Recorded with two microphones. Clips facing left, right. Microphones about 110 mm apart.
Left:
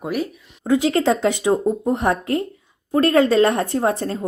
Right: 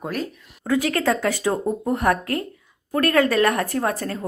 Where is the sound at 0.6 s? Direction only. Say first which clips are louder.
Left 4 dB; 25° left (ahead or behind).